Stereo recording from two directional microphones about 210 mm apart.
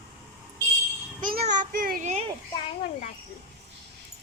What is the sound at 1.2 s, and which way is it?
A child's voice, 40° right (ahead or behind).